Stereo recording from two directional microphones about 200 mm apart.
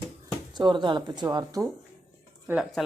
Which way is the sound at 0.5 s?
20° right (ahead or behind).